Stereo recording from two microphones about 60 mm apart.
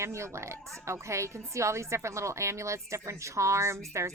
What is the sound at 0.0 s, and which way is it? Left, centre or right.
Speech, right.